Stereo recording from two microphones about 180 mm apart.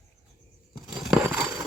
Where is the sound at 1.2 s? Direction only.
15° right (ahead or behind).